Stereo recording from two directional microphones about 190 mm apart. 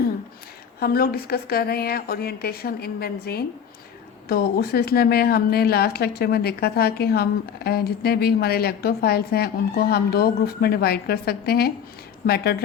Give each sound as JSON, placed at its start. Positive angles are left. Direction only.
{"t": 0.8, "sound": "a woman's voice", "side_deg": 50}